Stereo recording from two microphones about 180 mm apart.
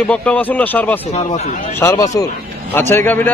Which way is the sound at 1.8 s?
15° left (ahead or behind).